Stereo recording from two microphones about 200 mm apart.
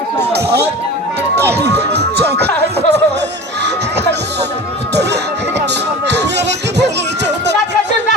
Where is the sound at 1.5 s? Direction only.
55° right (ahead or behind).